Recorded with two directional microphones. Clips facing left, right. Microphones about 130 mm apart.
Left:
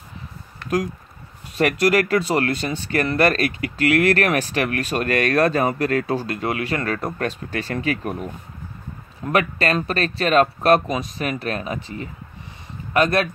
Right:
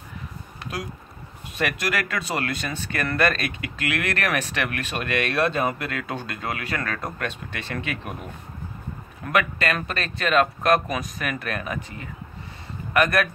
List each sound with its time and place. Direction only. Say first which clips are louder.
1.6 s speech: left 8 dB; 35° left (ahead or behind)
9.3 s speech: left 3 dB; 35° left (ahead or behind)